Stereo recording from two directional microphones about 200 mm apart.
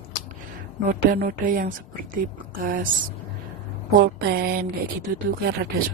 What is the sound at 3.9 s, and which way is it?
Speech, 50° right (ahead or behind).